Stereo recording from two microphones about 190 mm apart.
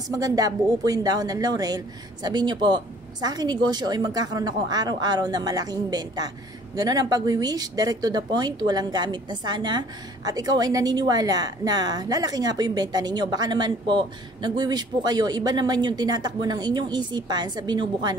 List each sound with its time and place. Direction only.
0.1 s speech: 20° right (ahead or behind)